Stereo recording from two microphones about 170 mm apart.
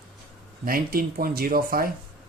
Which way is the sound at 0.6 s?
60° right (ahead or behind).